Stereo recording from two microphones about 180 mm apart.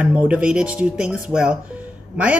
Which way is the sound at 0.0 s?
10° right (ahead or behind).